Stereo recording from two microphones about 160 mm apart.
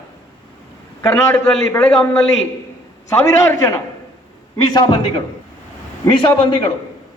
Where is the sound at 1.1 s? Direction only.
5° left (ahead or behind).